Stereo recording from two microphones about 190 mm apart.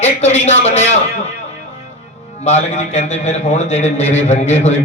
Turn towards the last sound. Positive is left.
turn(degrees=35)  # may be behind; listen again after turning